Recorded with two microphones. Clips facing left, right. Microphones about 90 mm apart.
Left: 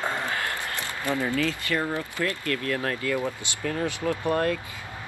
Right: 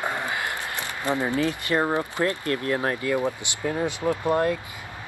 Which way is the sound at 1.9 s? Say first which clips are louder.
Right 4 dB; 20° right (ahead or behind).